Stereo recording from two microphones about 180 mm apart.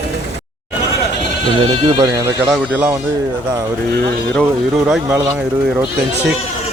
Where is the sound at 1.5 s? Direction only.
25° right (ahead or behind).